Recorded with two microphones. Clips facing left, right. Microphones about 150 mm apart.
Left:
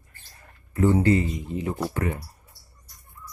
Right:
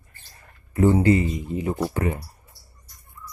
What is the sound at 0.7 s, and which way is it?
Speech, 15° right (ahead or behind).